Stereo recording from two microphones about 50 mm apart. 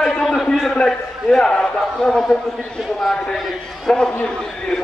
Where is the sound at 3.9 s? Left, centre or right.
Centre.